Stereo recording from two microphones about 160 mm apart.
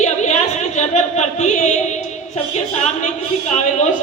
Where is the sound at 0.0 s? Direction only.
45° left (ahead or behind).